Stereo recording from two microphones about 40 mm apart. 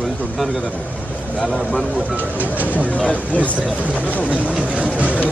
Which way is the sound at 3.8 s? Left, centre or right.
Right.